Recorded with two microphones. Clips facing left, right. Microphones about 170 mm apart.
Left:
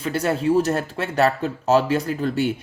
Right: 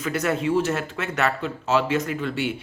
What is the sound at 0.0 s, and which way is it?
Speech, 30° left (ahead or behind).